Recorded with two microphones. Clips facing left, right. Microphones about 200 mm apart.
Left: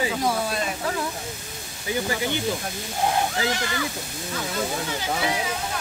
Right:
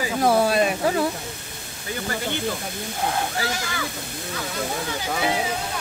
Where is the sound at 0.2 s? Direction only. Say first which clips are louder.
Right 6 dB; 65° right (ahead or behind).